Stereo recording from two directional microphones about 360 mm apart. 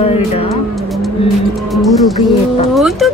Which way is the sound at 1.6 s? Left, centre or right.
Centre.